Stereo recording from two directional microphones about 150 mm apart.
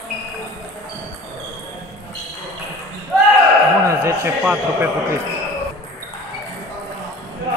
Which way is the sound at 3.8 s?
15° right (ahead or behind).